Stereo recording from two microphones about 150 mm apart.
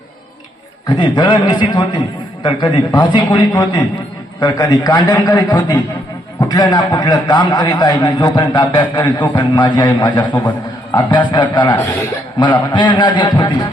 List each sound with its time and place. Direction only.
0.9 s a man's voice: 30° left (ahead or behind)